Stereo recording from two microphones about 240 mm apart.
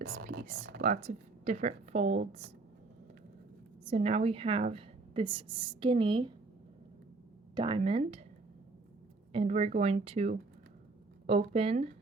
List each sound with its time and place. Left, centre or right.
0.0 s a woman's voice: right
3.8 s a woman's voice: right
7.5 s a woman's voice: right
9.3 s a woman's voice: right